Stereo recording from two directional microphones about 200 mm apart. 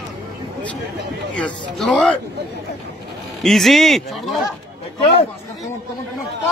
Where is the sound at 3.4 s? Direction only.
Centre (ahead or behind).